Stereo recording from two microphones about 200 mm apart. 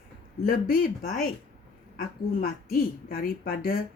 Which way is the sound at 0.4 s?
45° left (ahead or behind).